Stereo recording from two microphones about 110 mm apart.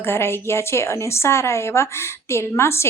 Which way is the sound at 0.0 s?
20° left (ahead or behind).